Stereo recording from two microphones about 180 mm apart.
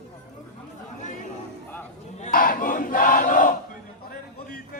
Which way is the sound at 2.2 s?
50° left (ahead or behind).